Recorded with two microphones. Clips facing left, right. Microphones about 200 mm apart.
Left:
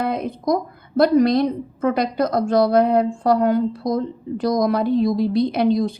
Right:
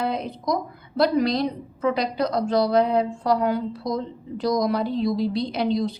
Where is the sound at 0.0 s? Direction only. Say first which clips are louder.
Left 4 dB; 50° left (ahead or behind).